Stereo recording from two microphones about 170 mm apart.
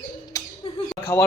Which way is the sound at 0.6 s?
30° left (ahead or behind).